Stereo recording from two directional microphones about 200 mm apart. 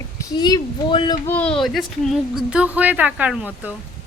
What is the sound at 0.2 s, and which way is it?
Speech, 20° left (ahead or behind).